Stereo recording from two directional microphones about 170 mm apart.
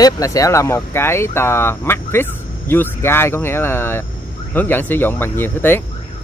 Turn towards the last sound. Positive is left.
turn(degrees=10)  # may be behind; listen again after turning